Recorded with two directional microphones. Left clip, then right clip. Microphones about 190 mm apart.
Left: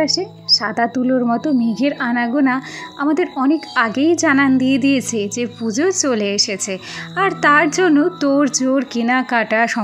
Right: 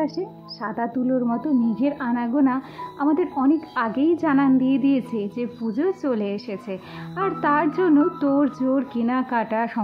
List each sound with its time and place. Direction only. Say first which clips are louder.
0.0 s a woman's voice: left 8 dB; 20° left (ahead or behind)